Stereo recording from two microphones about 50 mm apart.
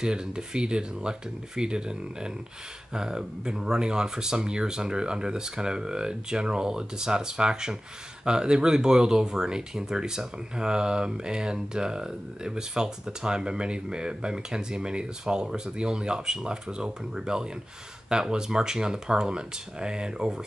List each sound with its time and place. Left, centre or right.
0.0 s speech: centre